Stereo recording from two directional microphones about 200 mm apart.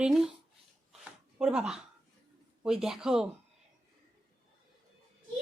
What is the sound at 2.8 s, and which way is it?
Speech, 5° right (ahead or behind).